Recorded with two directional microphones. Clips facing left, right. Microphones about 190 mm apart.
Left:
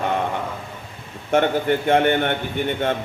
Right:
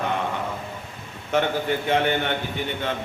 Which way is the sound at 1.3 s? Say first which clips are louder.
Left 4 dB; 50° left (ahead or behind).